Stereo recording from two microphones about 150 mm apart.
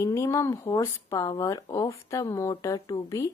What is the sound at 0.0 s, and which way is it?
A woman's voice, 20° left (ahead or behind).